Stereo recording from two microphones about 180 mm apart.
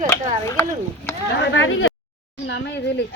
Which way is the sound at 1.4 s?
90° left.